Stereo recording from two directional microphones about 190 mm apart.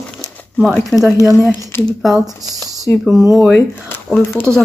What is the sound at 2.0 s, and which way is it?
Speech, centre (ahead or behind).